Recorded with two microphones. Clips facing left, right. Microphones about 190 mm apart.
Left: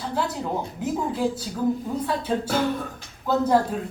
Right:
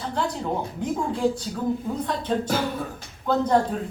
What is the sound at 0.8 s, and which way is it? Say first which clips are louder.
A woman's voice: even; 5° left (ahead or behind).